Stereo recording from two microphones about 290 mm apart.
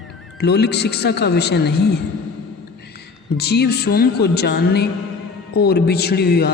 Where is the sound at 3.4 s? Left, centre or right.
Left.